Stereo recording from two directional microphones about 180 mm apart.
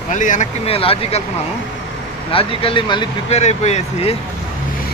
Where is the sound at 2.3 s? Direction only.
30° left (ahead or behind).